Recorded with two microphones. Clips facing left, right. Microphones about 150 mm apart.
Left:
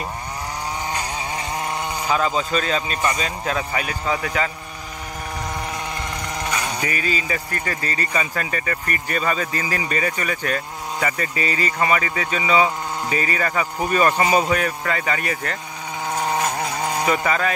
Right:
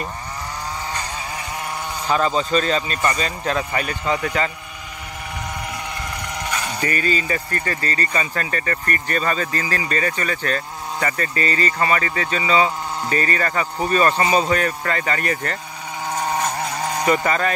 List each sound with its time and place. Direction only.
2.0 s a man's voice: 5° left (ahead or behind)
6.6 s speech: 10° left (ahead or behind)
17.0 s a man's voice: centre (ahead or behind)